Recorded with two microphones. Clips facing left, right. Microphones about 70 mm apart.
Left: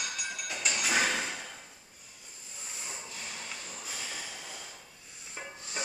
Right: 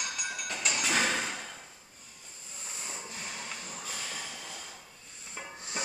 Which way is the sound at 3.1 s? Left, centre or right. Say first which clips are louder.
Right 2 dB; right.